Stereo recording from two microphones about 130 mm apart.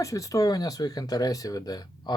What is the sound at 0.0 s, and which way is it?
Speech, 25° left (ahead or behind).